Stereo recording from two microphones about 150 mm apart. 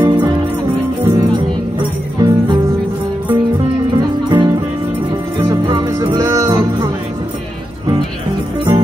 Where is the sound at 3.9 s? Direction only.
30° right (ahead or behind).